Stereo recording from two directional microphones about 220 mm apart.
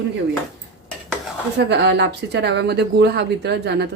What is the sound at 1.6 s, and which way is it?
Speech, 50° right (ahead or behind).